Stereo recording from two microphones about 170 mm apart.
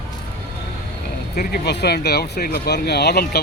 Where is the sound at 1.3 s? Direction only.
65° left (ahead or behind).